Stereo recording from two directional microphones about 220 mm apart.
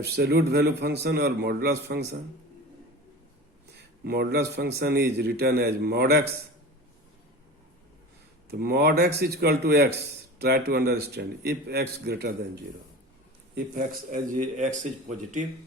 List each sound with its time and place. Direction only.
0.2 s a man's voice: 45° right (ahead or behind)
4.0 s a man's voice: 45° right (ahead or behind)
8.4 s a man's voice: 45° right (ahead or behind)
13.7 s speech: 35° right (ahead or behind)